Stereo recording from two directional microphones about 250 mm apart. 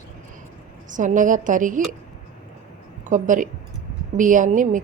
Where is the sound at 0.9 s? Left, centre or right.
Right.